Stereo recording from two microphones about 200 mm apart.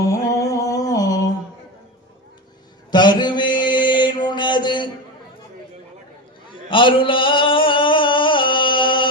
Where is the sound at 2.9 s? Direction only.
20° left (ahead or behind).